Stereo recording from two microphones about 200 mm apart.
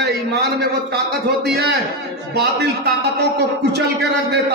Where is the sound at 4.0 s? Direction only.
55° right (ahead or behind).